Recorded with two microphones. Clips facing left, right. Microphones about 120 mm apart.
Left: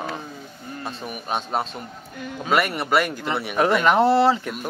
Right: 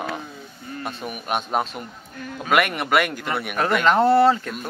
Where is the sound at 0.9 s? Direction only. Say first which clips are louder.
Right 1 dB; centre (ahead or behind).